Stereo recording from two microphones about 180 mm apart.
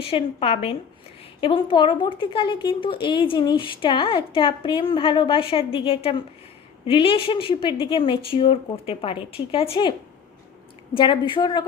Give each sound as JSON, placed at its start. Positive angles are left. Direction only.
{"t": 0.0, "sound": "a woman's voice", "side_deg": 30}
{"t": 10.9, "sound": "a woman's voice", "side_deg": 25}